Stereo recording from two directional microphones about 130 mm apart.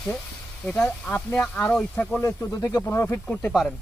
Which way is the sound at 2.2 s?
25° left (ahead or behind).